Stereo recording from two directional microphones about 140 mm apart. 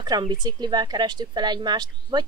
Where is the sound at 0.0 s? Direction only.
30° right (ahead or behind).